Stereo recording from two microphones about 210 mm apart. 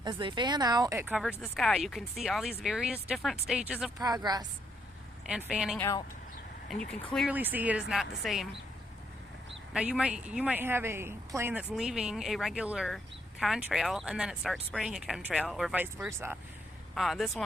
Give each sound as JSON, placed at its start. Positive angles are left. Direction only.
{"t": 0.0, "sound": "speech", "side_deg": -20}
{"t": 3.9, "sound": "speech", "side_deg": -20}
{"t": 5.3, "sound": "speech", "side_deg": -5}
{"t": 9.7, "sound": "speech", "side_deg": -5}